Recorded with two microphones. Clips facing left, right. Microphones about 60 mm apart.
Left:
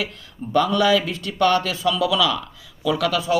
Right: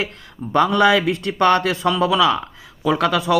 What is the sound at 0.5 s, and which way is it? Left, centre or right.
A man's voice, right.